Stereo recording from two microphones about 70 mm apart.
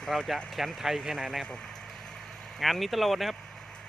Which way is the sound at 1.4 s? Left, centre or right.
Centre.